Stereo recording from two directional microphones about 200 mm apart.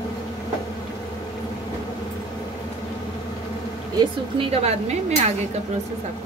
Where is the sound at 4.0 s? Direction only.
25° right (ahead or behind).